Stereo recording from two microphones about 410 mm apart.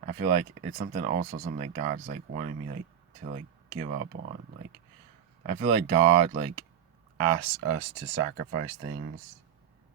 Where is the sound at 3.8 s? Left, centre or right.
Centre.